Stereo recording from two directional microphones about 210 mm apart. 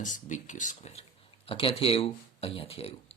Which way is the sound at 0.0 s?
35° left (ahead or behind).